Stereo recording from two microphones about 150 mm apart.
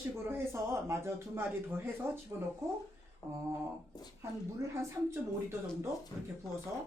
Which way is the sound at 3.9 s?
25° left (ahead or behind).